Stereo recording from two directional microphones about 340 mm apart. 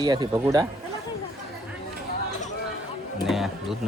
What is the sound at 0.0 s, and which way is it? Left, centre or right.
Speech, centre.